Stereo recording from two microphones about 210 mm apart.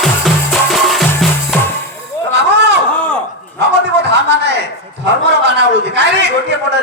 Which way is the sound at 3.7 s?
55° right (ahead or behind).